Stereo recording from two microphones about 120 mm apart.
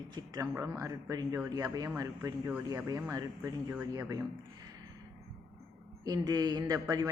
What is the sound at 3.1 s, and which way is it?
Speech, 25° right (ahead or behind).